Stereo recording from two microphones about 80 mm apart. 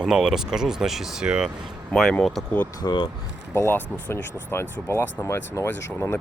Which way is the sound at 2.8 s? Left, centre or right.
Left.